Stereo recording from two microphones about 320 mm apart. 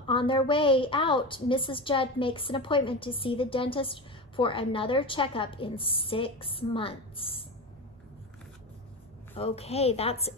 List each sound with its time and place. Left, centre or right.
0.0 s a woman's voice: centre
9.3 s a woman's voice: centre